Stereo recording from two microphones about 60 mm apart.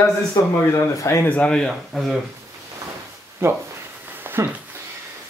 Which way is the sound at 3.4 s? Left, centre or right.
Right.